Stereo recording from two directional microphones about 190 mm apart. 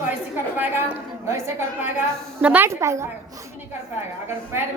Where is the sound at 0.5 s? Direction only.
10° right (ahead or behind).